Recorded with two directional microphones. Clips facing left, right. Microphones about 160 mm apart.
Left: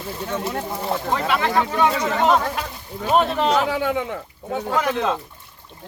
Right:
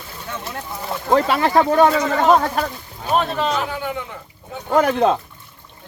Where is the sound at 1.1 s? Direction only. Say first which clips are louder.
Right 6 dB; 40° right (ahead or behind).